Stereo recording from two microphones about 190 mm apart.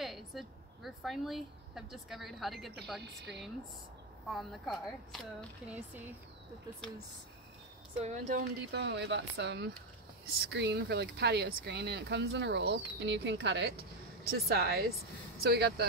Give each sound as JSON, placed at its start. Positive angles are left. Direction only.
{"t": 0.0, "sound": "a woman's voice", "side_deg": 0}
{"t": 4.3, "sound": "speech", "side_deg": 0}
{"t": 8.0, "sound": "speech", "side_deg": -40}
{"t": 8.5, "sound": "speech", "side_deg": -65}